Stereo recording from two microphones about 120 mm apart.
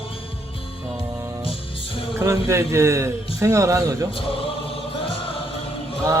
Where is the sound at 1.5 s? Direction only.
50° left (ahead or behind).